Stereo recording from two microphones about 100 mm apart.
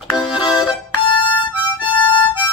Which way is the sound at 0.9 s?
55° left (ahead or behind).